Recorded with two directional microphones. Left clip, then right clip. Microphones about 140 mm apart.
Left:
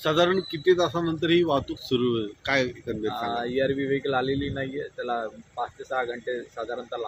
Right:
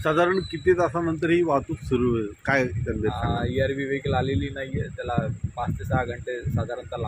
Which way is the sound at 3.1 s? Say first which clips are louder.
Even; 15° left (ahead or behind).